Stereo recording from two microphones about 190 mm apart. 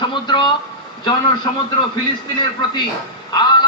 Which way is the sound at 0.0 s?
25° left (ahead or behind).